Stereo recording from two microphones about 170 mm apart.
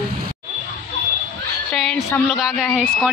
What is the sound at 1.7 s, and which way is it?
A woman's voice, centre (ahead or behind).